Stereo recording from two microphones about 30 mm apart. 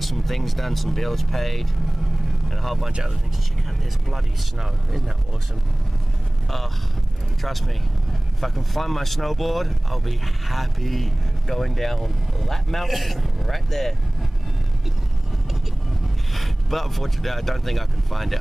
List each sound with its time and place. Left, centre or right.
0.0 s speech: centre
7.4 s speech: centre
12.8 s speech: centre
13.5 s speech: centre
16.3 s speech: centre